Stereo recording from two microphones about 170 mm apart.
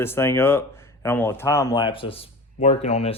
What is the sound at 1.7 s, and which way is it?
Speech, 30° left (ahead or behind).